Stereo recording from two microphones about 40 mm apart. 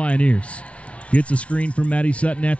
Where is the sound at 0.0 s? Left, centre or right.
Left.